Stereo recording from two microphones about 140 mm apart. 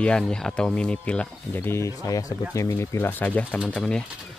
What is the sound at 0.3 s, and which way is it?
Speech, 5° left (ahead or behind).